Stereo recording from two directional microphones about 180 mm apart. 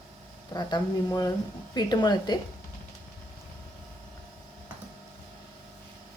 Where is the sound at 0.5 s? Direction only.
20° left (ahead or behind).